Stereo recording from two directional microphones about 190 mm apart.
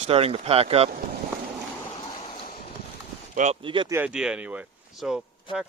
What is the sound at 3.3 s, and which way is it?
Speech, 35° right (ahead or behind).